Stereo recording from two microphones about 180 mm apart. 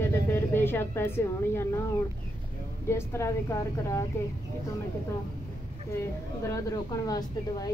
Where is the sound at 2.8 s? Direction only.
15° left (ahead or behind).